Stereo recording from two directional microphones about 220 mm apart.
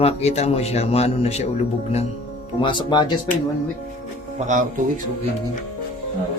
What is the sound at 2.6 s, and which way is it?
Speech, 20° left (ahead or behind).